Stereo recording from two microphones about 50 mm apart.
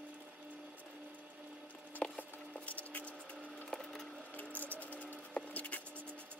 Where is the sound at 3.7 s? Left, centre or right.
Centre.